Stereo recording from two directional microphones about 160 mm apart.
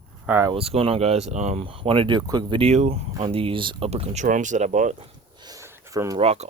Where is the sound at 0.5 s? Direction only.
35° right (ahead or behind).